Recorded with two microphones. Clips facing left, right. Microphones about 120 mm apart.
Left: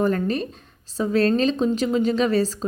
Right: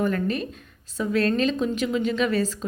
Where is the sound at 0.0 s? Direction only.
35° left (ahead or behind).